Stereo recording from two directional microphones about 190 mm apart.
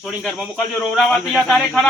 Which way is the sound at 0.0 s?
Centre (ahead or behind).